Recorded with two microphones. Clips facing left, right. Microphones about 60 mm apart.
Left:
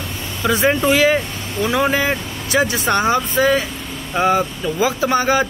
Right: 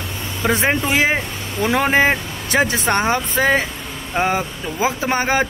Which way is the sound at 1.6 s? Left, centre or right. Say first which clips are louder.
Even; right.